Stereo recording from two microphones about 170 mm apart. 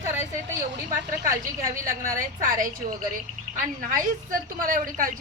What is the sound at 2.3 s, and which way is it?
A woman's voice, 50° right (ahead or behind).